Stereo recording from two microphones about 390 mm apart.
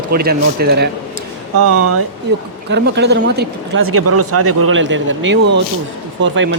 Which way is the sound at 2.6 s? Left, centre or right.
Right.